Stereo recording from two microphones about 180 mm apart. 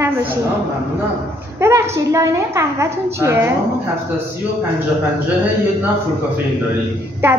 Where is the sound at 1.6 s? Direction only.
15° right (ahead or behind).